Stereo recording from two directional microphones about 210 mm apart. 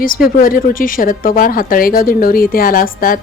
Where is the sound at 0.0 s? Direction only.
40° left (ahead or behind).